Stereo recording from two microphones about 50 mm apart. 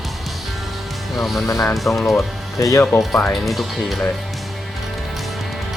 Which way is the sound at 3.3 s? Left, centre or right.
Centre.